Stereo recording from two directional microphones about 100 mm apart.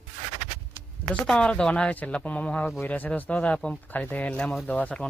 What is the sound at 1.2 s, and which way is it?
Speech, 10° left (ahead or behind).